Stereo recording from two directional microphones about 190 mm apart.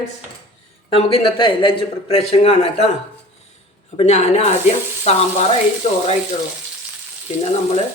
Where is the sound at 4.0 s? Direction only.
35° left (ahead or behind).